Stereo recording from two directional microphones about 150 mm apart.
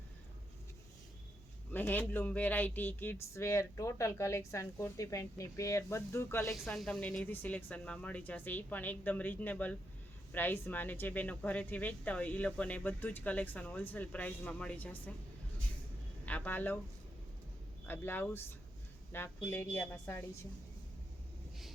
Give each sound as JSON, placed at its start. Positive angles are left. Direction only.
{"t": 1.7, "sound": "speech", "side_deg": 10}
{"t": 6.5, "sound": "speech", "side_deg": 5}
{"t": 16.2, "sound": "speech", "side_deg": 10}
{"t": 17.8, "sound": "speech", "side_deg": 15}